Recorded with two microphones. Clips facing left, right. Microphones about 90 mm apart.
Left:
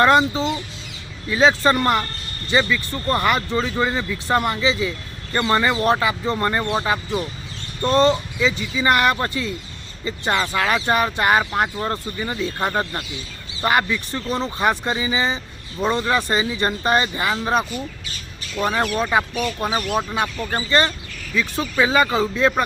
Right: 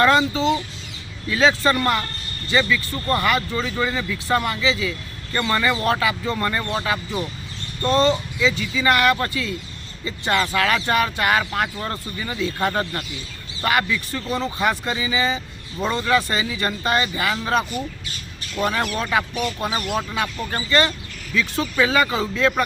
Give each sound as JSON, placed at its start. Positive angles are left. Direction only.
{"t": 0.0, "sound": "speech", "side_deg": 20}
{"t": 18.9, "sound": "speech", "side_deg": 15}